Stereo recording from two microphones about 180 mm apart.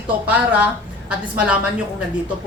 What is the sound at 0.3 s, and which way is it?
A woman's voice, 10° right (ahead or behind).